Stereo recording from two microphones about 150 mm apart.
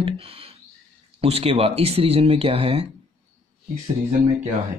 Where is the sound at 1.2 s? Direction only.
40° right (ahead or behind).